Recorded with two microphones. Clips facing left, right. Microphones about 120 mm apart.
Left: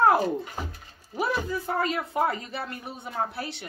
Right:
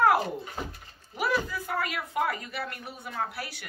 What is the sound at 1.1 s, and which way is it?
Speech, 25° left (ahead or behind).